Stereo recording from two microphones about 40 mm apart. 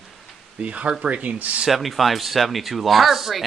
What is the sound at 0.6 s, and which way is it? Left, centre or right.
Speech, right.